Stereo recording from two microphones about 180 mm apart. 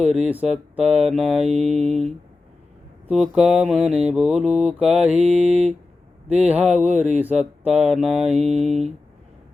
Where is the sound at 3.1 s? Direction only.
Centre (ahead or behind).